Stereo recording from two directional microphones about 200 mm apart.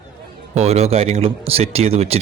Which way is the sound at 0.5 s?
35° right (ahead or behind).